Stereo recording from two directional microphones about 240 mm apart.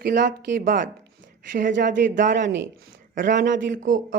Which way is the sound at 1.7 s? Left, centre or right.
Right.